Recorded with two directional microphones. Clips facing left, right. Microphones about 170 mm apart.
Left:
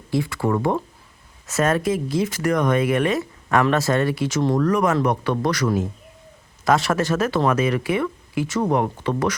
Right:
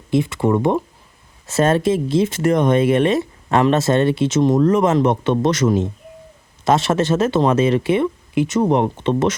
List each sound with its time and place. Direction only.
0.1 s speech: 20° right (ahead or behind)